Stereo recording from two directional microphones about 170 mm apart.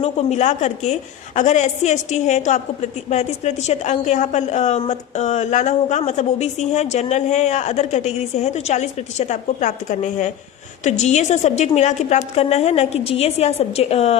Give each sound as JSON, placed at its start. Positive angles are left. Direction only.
{"t": 0.0, "sound": "a woman's voice", "side_deg": 40}